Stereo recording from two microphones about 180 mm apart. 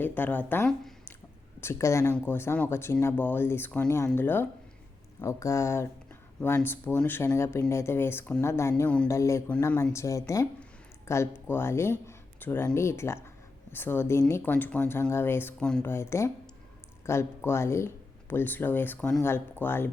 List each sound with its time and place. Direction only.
0.0 s speech: 10° left (ahead or behind)